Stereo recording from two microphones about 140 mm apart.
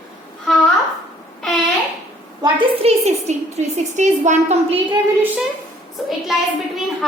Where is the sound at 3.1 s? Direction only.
55° right (ahead or behind).